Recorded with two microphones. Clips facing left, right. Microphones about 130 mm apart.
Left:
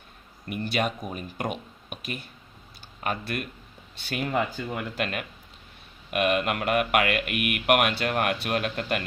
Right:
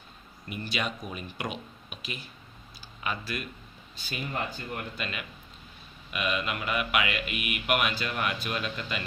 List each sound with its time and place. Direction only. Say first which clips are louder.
0.4 s speech: left 6 dB; 55° left (ahead or behind)
3.9 s speech: left 7 dB; 65° left (ahead or behind)
6.1 s speech: left 7 dB; 55° left (ahead or behind)